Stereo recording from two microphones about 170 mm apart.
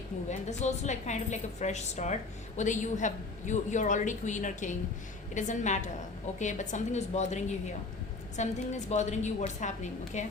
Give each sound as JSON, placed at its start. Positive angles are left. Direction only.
{"t": 0.3, "sound": "a woman's voice", "side_deg": 45}